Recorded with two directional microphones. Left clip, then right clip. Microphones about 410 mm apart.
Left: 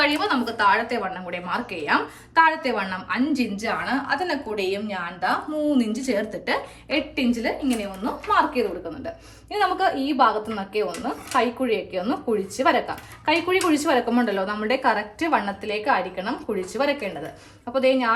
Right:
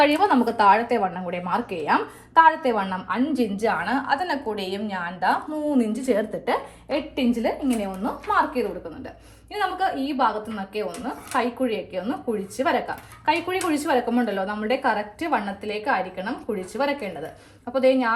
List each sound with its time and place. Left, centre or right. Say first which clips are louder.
0.0 s a woman's voice: right 3 dB; centre